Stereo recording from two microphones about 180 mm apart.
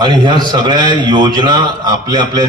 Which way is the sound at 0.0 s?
25° right (ahead or behind).